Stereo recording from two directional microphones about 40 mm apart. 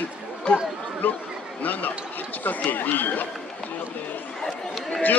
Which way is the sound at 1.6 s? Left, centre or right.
Left.